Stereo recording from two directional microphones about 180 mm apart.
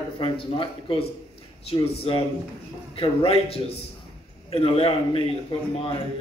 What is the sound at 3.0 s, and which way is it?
A man's voice, 30° left (ahead or behind).